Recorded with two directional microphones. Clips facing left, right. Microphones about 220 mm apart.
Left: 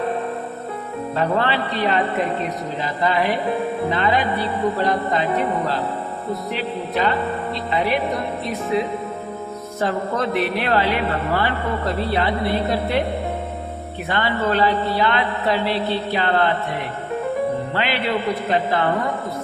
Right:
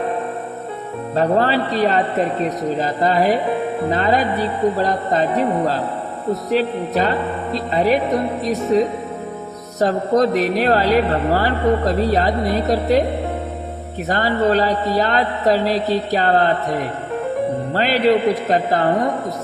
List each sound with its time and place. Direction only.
1.1 s speech: 40° right (ahead or behind)
6.5 s speech: 40° right (ahead or behind)
14.1 s speech: 40° right (ahead or behind)